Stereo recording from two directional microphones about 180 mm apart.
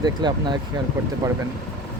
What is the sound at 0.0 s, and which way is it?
Speech, 25° right (ahead or behind).